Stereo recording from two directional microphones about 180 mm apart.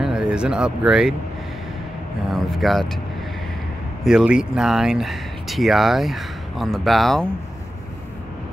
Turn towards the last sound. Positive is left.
turn(degrees=0)  # may be behind; listen again after turning